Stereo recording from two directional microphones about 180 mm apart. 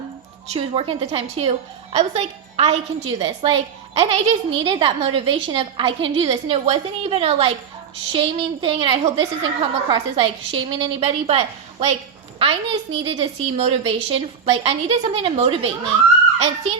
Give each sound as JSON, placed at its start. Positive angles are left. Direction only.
{"t": 0.5, "sound": "a woman's voice", "side_deg": -30}
{"t": 3.2, "sound": "a woman's voice", "side_deg": -25}